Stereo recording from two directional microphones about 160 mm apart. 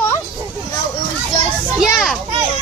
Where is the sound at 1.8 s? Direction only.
5° right (ahead or behind).